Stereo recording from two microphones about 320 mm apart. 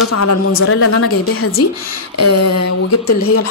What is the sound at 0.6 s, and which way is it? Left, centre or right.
A woman's voice, left.